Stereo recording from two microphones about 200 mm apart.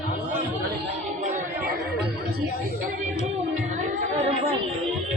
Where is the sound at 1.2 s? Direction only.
40° right (ahead or behind).